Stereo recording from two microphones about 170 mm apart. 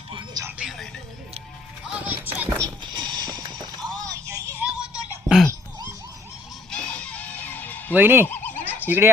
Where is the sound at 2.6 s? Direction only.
25° right (ahead or behind).